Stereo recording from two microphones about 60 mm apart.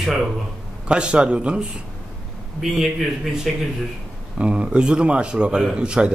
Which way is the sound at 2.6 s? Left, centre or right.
Centre.